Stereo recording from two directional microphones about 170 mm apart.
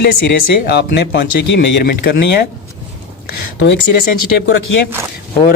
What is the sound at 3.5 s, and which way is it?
Speech, 90° left.